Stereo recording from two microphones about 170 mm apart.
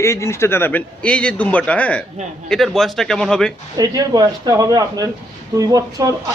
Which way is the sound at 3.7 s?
20° right (ahead or behind).